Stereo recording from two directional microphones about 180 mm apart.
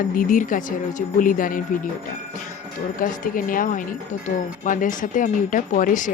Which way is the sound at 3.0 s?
50° left (ahead or behind).